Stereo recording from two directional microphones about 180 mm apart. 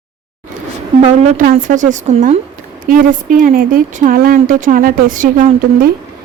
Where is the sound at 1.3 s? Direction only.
50° right (ahead or behind).